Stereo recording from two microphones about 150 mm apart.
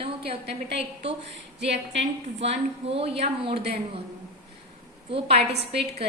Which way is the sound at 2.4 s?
40° right (ahead or behind).